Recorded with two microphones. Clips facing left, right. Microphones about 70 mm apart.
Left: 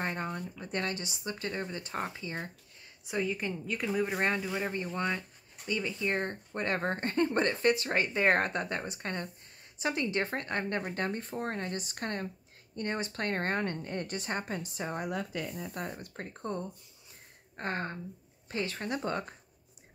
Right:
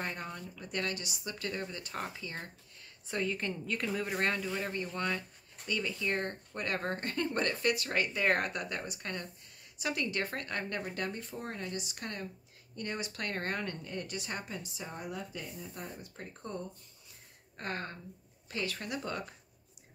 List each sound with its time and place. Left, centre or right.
0.0 s speech: left
10.9 s a woman's voice: left
17.6 s speech: left